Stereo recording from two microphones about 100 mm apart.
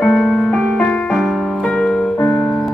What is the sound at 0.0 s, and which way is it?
Music, 10° left (ahead or behind).